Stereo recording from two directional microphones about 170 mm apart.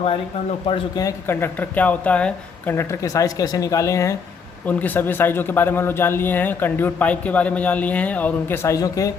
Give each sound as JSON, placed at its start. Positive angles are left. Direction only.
{"t": 0.7, "sound": "a man's voice", "side_deg": 20}